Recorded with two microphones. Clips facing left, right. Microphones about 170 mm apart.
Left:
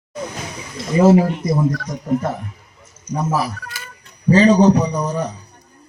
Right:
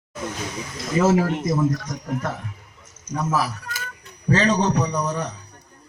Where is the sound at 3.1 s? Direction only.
30° left (ahead or behind).